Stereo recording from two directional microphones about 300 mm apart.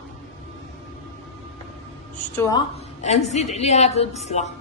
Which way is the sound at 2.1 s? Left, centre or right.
Centre.